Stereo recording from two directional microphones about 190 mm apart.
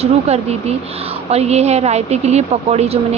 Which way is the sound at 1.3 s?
35° right (ahead or behind).